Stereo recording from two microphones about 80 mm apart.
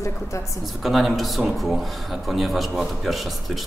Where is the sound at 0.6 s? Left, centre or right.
Centre.